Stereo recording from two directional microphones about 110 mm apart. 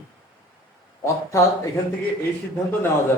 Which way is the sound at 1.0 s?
30° left (ahead or behind).